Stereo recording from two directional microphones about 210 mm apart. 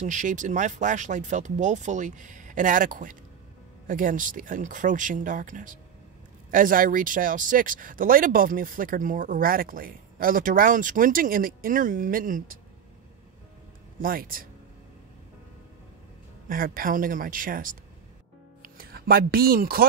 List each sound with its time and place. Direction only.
0.0 s speech: 35° right (ahead or behind)
14.0 s speech: 45° right (ahead or behind)
16.4 s speech: 45° right (ahead or behind)